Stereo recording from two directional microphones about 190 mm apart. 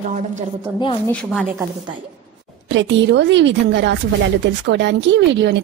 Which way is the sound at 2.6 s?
70° right (ahead or behind).